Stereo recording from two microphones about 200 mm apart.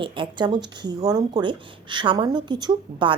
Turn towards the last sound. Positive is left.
turn(degrees=-20)  # may be behind; listen again after turning